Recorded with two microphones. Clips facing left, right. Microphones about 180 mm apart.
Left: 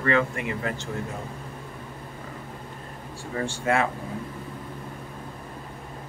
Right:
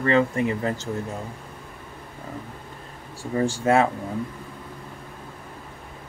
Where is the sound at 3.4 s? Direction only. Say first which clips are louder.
Right 5 dB; 40° right (ahead or behind).